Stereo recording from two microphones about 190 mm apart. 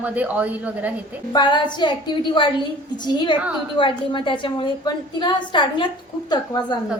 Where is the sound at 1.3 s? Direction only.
25° left (ahead or behind).